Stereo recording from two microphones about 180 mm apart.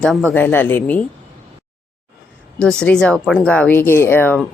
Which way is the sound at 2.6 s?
5° left (ahead or behind).